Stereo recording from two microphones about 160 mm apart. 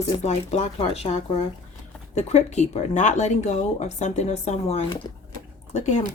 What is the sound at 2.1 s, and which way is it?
Speech, 45° left (ahead or behind).